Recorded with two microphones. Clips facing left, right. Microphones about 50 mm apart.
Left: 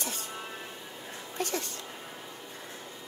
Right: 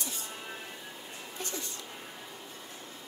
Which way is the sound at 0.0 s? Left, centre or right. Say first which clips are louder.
Left 3 dB; left.